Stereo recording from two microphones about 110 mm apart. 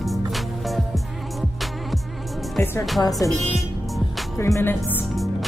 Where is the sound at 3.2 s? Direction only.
30° left (ahead or behind).